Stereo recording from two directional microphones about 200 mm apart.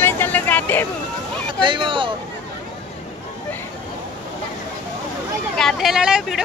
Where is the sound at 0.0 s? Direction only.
10° left (ahead or behind).